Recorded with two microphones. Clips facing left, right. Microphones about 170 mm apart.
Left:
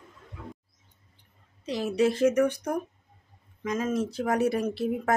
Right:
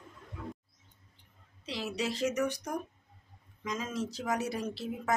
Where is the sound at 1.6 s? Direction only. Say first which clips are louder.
Left 10 dB; 50° left (ahead or behind).